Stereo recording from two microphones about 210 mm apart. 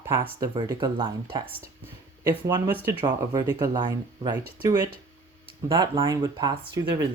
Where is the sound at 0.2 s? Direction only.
20° right (ahead or behind).